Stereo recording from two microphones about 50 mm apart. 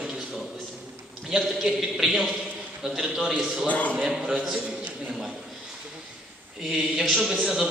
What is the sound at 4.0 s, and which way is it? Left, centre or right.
Speech, centre.